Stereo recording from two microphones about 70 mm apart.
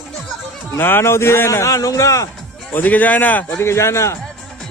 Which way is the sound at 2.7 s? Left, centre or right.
Left.